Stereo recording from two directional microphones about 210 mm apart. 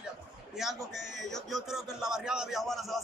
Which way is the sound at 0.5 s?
Centre (ahead or behind).